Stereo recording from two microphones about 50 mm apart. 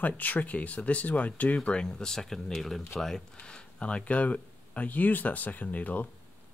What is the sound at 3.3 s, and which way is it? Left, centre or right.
Speech, left.